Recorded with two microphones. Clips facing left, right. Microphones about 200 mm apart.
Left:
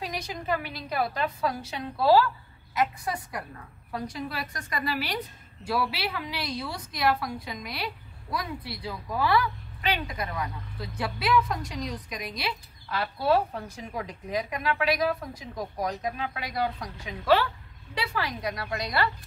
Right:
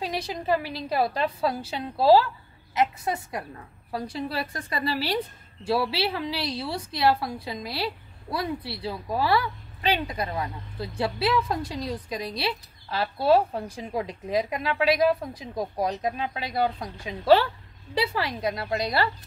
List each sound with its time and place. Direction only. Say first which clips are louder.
0.0 s a woman's voice: right 4 dB; 30° right (ahead or behind)